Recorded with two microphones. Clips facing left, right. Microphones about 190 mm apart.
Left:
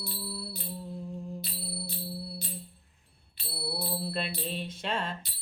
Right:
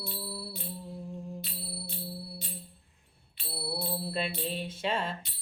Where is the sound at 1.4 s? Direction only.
35° left (ahead or behind).